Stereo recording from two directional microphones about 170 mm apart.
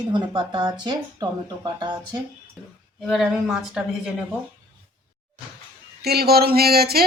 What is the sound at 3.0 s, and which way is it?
A woman's voice, 5° right (ahead or behind).